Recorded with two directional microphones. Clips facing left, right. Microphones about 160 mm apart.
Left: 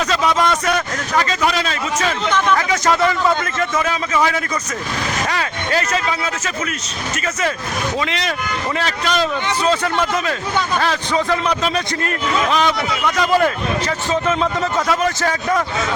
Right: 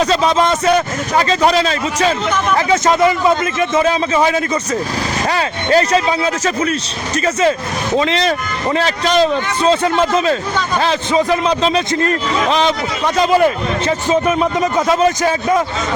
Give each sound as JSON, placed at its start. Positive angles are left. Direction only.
{"t": 0.0, "sound": "a man's voice", "side_deg": -30}
{"t": 7.9, "sound": "a man's voice", "side_deg": -30}
{"t": 13.3, "sound": "a man's voice", "side_deg": -20}